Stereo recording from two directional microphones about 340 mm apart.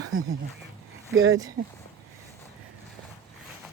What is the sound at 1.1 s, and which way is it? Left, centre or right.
Speech, right.